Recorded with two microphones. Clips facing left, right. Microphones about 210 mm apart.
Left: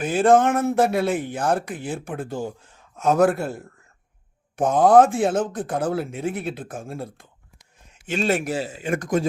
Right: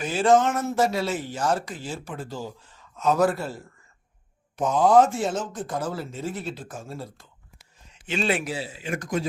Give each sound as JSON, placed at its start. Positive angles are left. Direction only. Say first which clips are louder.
{"t": 0.0, "sound": "speech", "louder": "left 3 dB", "side_deg": 55}
{"t": 4.5, "sound": "a man's voice", "louder": "left 3 dB", "side_deg": 55}